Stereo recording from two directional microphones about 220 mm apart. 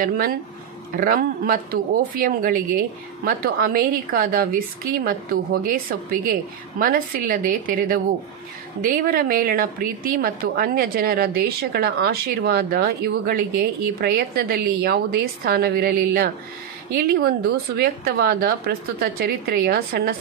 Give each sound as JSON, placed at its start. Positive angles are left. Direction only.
{"t": 0.0, "sound": "speech", "side_deg": -40}
{"t": 8.8, "sound": "a woman's voice", "side_deg": -40}